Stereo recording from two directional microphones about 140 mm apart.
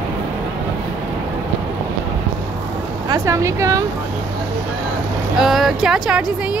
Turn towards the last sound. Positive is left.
turn(degrees=-5)  # may be behind; listen again after turning